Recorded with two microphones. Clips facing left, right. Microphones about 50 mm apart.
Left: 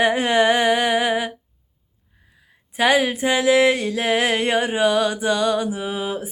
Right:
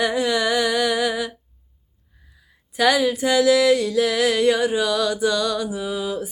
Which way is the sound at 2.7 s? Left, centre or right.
Left.